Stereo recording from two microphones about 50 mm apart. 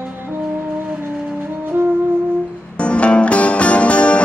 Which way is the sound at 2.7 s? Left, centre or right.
Left.